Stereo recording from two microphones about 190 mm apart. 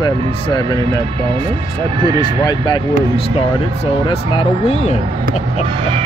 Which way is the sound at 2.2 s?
25° left (ahead or behind).